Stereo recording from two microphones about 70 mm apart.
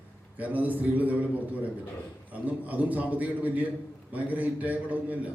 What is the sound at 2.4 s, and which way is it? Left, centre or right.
A man's voice, right.